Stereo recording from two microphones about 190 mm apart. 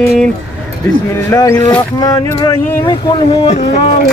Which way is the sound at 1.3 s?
15° left (ahead or behind).